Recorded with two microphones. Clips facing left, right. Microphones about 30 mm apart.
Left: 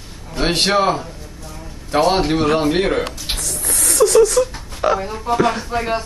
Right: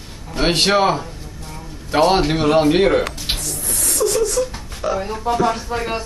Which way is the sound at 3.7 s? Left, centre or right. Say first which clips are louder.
Left 5 dB; left.